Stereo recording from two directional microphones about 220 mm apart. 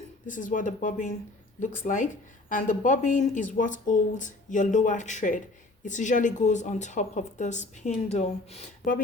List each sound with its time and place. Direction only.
0.3 s speech: 35° left (ahead or behind)